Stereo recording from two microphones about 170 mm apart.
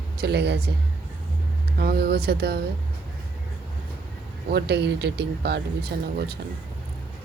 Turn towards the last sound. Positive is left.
turn(degrees=-70)  # may be behind; listen again after turning